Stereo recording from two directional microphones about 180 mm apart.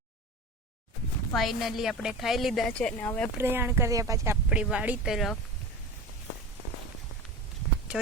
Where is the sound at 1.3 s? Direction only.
Centre (ahead or behind).